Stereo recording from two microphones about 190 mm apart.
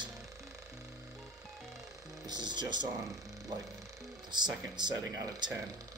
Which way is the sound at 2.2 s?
25° right (ahead or behind).